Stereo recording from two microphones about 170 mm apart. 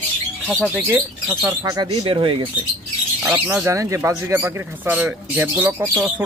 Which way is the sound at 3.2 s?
15° right (ahead or behind).